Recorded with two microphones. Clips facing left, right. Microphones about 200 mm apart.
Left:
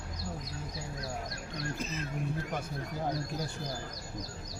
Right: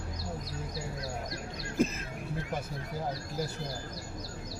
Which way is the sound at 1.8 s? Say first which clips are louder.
Right 9 dB; 50° right (ahead or behind).